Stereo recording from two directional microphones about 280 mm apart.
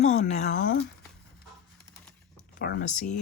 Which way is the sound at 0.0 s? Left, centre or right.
Left.